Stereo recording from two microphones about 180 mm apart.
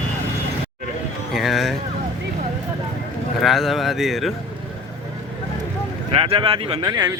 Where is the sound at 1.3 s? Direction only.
Centre (ahead or behind).